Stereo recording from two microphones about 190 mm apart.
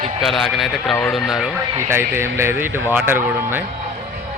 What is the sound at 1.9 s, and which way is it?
Speech, 10° right (ahead or behind).